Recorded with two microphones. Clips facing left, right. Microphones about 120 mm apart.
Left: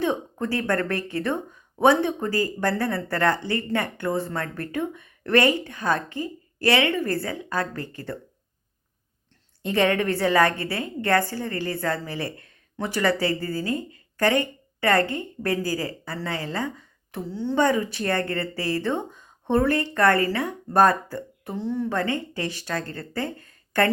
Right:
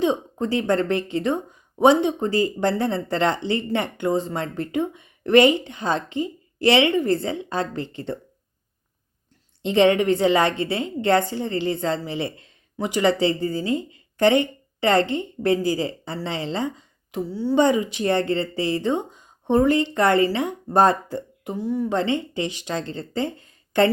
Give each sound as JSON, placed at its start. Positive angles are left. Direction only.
{"t": 0.0, "sound": "a woman's voice", "side_deg": -20}
{"t": 9.6, "sound": "a woman's voice", "side_deg": -20}